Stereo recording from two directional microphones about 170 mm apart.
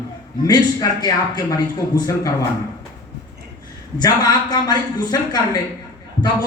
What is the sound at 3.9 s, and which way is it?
A man's voice, 25° left (ahead or behind).